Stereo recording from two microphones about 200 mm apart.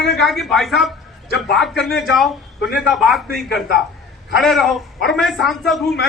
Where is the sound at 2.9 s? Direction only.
Centre (ahead or behind).